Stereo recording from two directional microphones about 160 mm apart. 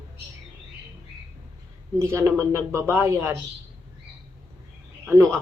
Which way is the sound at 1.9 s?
15° right (ahead or behind).